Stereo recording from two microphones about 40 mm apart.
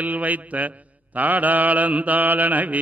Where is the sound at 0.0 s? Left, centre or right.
Right.